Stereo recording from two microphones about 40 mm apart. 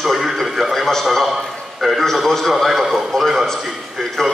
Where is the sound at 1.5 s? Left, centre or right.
Centre.